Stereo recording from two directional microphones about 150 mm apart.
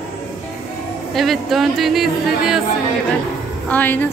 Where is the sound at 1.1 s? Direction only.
Centre (ahead or behind).